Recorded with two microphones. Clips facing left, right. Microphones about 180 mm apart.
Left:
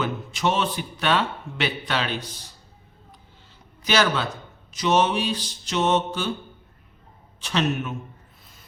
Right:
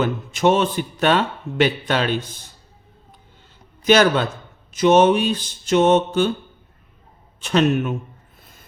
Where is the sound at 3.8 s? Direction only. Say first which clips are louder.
Right 7 dB; 50° right (ahead or behind).